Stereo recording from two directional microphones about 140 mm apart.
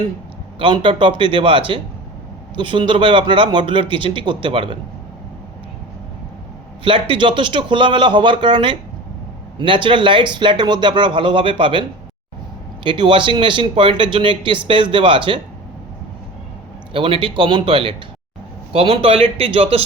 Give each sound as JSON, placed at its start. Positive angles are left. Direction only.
{"t": 0.6, "sound": "speech", "side_deg": -35}
{"t": 6.8, "sound": "speech", "side_deg": -35}
{"t": 16.9, "sound": "speech", "side_deg": -40}